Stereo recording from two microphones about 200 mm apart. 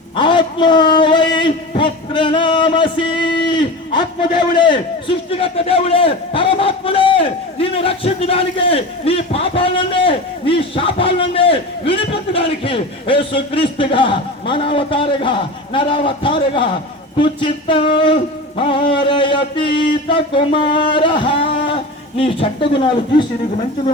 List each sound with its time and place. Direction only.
0.2 s a sound: 25° left (ahead or behind)
4.2 s a man's voice: 25° left (ahead or behind)
17.2 s music: 25° left (ahead or behind)